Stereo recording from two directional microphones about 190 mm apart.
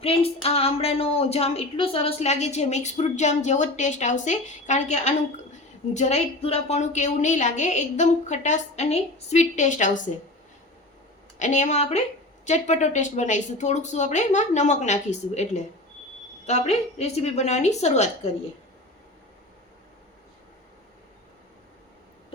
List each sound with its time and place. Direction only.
0.0 s a sound: 30° left (ahead or behind)
0.4 s a woman's voice: 30° left (ahead or behind)
11.3 s a woman's voice: 40° left (ahead or behind)